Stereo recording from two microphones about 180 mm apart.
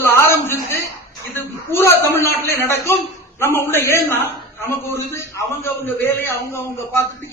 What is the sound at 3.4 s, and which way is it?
A man's voice, 15° left (ahead or behind).